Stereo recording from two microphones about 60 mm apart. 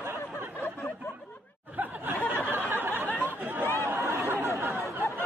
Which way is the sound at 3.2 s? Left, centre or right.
Right.